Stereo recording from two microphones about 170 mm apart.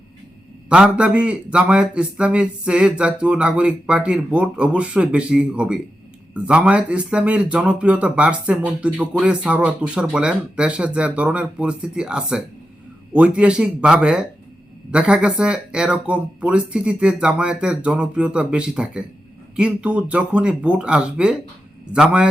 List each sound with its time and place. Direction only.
0.7 s speech: 5° right (ahead or behind)